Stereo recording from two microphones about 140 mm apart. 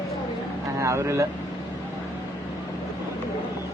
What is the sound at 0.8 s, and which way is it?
Speech, 20° right (ahead or behind).